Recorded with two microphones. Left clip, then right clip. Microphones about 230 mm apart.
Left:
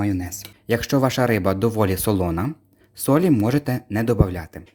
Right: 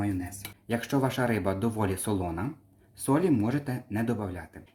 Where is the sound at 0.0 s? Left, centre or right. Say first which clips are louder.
Left 7 dB; left.